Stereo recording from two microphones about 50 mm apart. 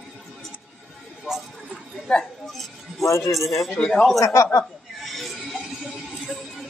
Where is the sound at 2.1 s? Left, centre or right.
Centre.